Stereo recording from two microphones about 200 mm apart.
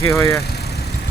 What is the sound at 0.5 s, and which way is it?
Vehicle, 55° left (ahead or behind).